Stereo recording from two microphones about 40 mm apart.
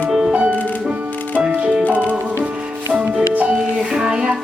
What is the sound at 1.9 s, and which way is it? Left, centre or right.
Music, left.